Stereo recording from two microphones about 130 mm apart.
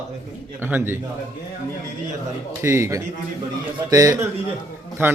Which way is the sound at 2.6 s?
20° right (ahead or behind).